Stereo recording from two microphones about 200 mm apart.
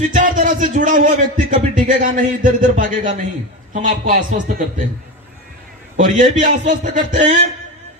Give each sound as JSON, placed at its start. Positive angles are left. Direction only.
{"t": 0.1, "sound": "a man's voice", "side_deg": -40}
{"t": 6.0, "sound": "a man's voice", "side_deg": -40}